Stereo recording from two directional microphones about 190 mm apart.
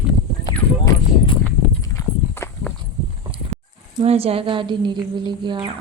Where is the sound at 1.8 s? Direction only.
15° left (ahead or behind).